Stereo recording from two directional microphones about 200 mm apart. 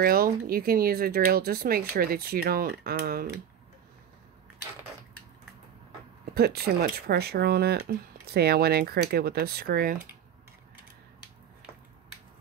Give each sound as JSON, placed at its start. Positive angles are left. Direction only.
{"t": 0.0, "sound": "speech", "side_deg": -50}
{"t": 6.3, "sound": "speech", "side_deg": -50}